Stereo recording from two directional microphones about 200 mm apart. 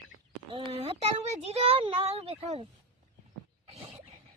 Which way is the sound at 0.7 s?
30° right (ahead or behind).